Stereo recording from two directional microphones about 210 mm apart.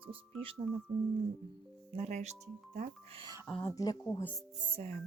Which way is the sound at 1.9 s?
30° right (ahead or behind).